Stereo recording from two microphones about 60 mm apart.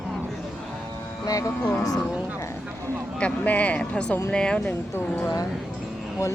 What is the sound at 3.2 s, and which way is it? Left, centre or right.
Speech, left.